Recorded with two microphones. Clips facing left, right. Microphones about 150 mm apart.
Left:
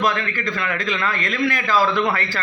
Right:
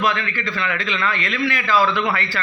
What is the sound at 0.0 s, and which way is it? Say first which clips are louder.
A man's voice: left 1 dB; 40° left (ahead or behind).